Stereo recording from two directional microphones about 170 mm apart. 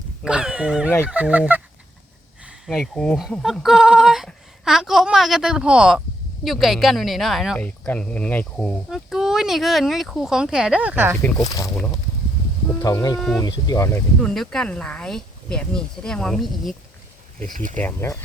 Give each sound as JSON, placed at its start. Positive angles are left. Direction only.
{"t": 0.2, "sound": "a woman's voice", "side_deg": -5}
{"t": 11.2, "sound": "speech", "side_deg": 20}
{"t": 12.8, "sound": "speech", "side_deg": 20}
{"t": 13.1, "sound": "a woman's voice", "side_deg": 0}
{"t": 13.4, "sound": "speech", "side_deg": 25}
{"t": 14.2, "sound": "a woman's voice", "side_deg": 5}
{"t": 17.4, "sound": "speech", "side_deg": -50}
{"t": 17.7, "sound": "speech", "side_deg": 15}